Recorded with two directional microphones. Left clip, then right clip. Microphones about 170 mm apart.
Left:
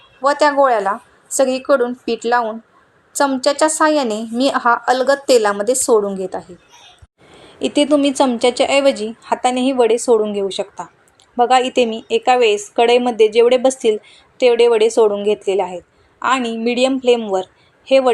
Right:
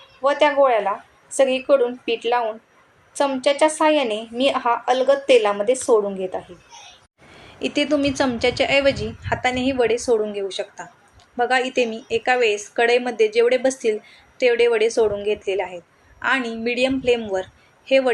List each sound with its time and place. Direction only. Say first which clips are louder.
0.2 s a woman's voice: left 3 dB; 45° left (ahead or behind)
7.3 s a woman's voice: left 6 dB; 25° left (ahead or behind)